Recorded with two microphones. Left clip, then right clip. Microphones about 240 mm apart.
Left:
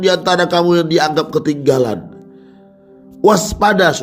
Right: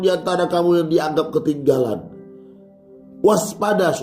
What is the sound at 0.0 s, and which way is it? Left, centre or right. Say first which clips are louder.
A man's voice: left 5 dB; left.